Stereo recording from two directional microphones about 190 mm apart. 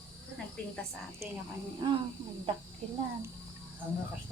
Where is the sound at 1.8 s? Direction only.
25° right (ahead or behind).